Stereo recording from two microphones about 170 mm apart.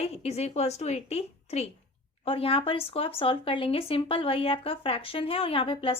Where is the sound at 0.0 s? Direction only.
35° left (ahead or behind).